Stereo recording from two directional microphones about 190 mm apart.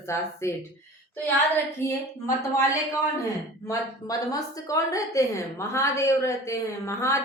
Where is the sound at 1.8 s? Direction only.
15° left (ahead or behind).